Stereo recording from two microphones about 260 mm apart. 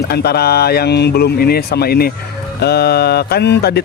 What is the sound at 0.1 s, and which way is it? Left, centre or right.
Speech, left.